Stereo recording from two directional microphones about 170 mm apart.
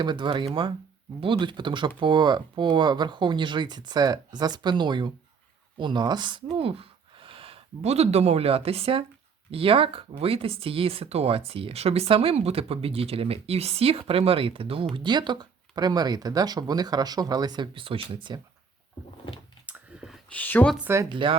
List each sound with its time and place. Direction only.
0.0 s speech: 25° right (ahead or behind)
19.6 s a sound: 5° right (ahead or behind)
20.3 s speech: 10° left (ahead or behind)
20.7 s speech: 15° right (ahead or behind)
21.1 s speech: 30° right (ahead or behind)